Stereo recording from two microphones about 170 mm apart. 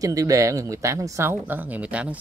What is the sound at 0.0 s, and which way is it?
Speech, 20° right (ahead or behind).